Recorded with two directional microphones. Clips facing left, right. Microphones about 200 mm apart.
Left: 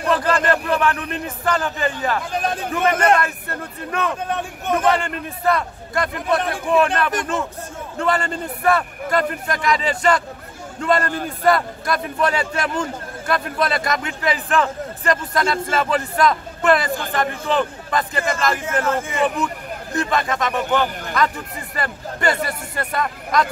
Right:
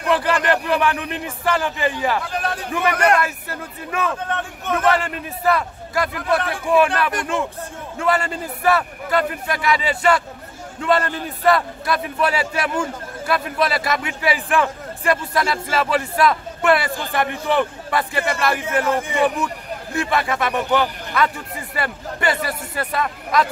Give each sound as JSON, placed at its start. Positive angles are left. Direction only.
{"t": 0.1, "sound": "a man's voice", "side_deg": -10}
{"t": 2.9, "sound": "a man's voice", "side_deg": 25}
{"t": 3.2, "sound": "a man's voice", "side_deg": -5}
{"t": 4.1, "sound": "a man's voice", "side_deg": 15}
{"t": 4.8, "sound": "a man's voice", "side_deg": -5}